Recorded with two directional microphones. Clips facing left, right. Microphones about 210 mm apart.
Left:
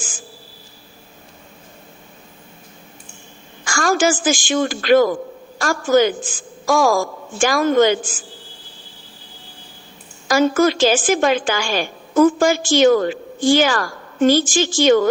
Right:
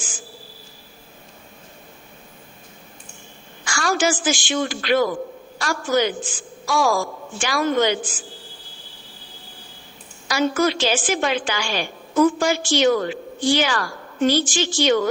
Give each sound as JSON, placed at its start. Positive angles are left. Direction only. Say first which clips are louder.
{"t": 3.6, "sound": "a woman's voice", "louder": "left 4 dB", "side_deg": 45}
{"t": 10.2, "sound": "a woman's voice", "louder": "left 5 dB", "side_deg": 45}